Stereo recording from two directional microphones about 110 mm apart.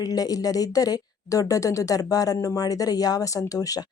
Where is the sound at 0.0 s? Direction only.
35° left (ahead or behind).